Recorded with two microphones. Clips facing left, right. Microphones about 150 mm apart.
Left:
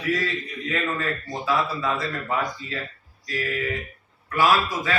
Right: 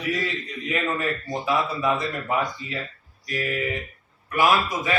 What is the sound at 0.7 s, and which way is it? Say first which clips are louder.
Speech: right 1 dB; 15° right (ahead or behind).